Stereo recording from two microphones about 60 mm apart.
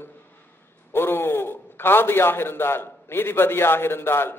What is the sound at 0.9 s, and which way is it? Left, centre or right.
A man's voice, left.